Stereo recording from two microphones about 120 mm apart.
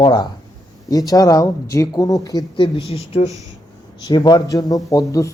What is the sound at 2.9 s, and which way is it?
Speech, 55° left (ahead or behind).